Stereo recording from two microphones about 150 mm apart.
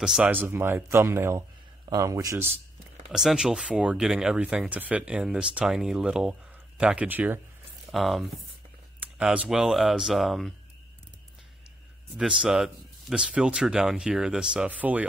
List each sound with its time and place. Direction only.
0.0 s speech: 5° right (ahead or behind)
3.1 s speech: centre (ahead or behind)
7.9 s speech: centre (ahead or behind)
12.2 s speech: 5° right (ahead or behind)